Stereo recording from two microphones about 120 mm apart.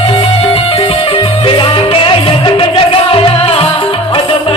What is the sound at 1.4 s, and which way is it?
Music, 45° left (ahead or behind).